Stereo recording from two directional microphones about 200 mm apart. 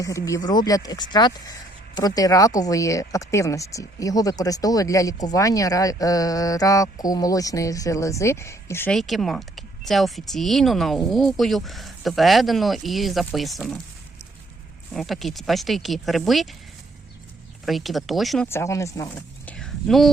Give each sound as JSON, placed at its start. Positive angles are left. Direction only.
{"t": 0.0, "sound": "speech", "side_deg": 15}
{"t": 14.9, "sound": "speech", "side_deg": 0}
{"t": 17.7, "sound": "speech", "side_deg": 0}
{"t": 18.4, "sound": "speech", "side_deg": 15}